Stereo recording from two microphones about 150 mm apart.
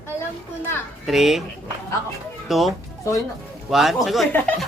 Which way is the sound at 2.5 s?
Centre (ahead or behind).